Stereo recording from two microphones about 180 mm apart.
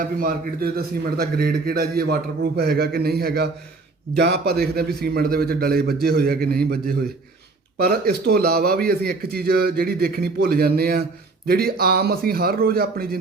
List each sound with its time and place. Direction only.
0.0 s a man's voice: 50° right (ahead or behind)